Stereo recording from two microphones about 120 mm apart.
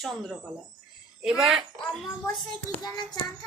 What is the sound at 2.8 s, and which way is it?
Child singing, 35° left (ahead or behind).